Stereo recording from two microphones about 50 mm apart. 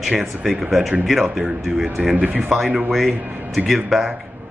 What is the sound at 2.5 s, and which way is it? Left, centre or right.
Speech, centre.